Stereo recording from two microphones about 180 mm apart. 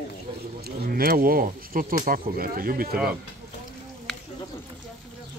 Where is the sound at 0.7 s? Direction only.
55° right (ahead or behind).